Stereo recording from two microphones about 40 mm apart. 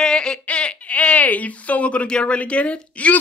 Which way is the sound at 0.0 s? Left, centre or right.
Centre.